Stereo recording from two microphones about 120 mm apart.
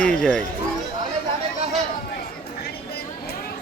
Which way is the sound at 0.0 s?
10° left (ahead or behind).